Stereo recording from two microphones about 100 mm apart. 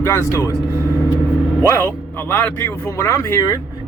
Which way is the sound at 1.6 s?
25° left (ahead or behind).